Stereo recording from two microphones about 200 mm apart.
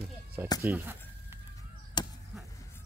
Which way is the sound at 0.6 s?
10° right (ahead or behind).